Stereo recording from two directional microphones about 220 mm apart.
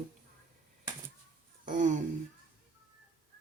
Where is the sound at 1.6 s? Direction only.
35° right (ahead or behind).